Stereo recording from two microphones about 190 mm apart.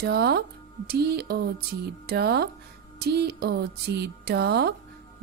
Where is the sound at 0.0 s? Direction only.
55° right (ahead or behind).